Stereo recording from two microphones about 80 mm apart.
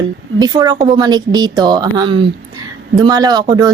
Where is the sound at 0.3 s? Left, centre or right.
Right.